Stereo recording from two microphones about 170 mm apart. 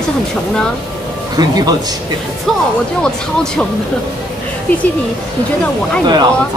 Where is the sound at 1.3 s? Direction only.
25° right (ahead or behind).